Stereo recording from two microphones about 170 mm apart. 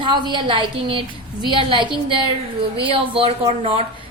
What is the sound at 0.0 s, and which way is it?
A woman's voice, 25° right (ahead or behind).